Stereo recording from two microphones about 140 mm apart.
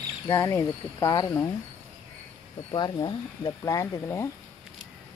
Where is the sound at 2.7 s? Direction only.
30° left (ahead or behind).